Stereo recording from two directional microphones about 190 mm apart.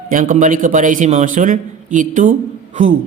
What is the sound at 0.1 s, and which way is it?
Speech, 45° right (ahead or behind).